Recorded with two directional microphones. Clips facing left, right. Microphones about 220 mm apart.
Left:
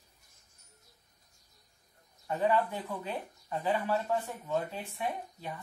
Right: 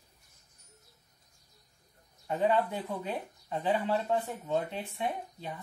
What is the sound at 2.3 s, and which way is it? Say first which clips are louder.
Speech: right 1 dB; 20° right (ahead or behind).